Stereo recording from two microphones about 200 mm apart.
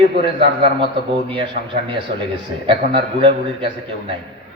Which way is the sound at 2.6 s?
25° right (ahead or behind).